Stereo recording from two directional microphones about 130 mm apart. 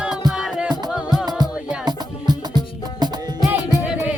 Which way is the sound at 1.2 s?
30° right (ahead or behind).